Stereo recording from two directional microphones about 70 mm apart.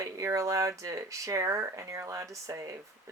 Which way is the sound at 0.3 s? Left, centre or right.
Right.